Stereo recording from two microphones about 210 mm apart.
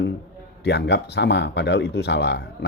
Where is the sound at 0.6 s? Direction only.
55° left (ahead or behind).